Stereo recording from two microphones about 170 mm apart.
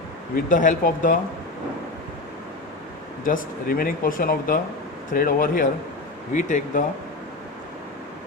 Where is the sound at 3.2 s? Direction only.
55° left (ahead or behind).